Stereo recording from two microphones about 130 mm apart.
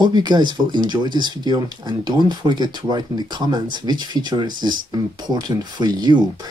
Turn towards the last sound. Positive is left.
turn(degrees=-30)  # may be behind; listen again after turning